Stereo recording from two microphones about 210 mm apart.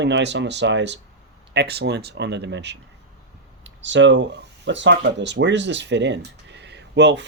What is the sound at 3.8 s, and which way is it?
Speech, 60° right (ahead or behind).